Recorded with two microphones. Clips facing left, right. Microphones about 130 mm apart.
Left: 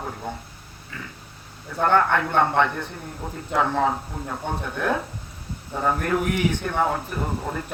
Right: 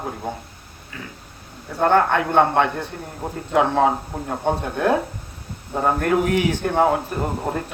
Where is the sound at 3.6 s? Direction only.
60° right (ahead or behind).